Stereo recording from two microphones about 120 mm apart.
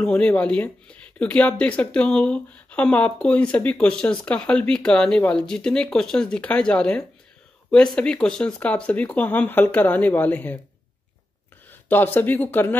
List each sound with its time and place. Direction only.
0.0 s speech: 10° left (ahead or behind)
11.9 s speech: 15° left (ahead or behind)